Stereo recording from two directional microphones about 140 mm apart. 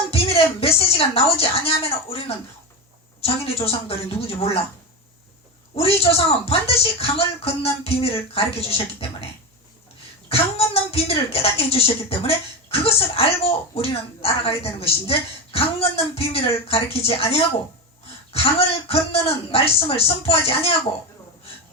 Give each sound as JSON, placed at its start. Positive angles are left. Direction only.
{"t": 0.1, "sound": "a woman's voice", "side_deg": 45}
{"t": 5.7, "sound": "speech", "side_deg": 45}
{"t": 10.2, "sound": "speech", "side_deg": 45}